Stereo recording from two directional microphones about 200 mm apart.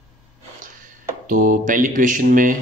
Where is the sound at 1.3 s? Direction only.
40° right (ahead or behind).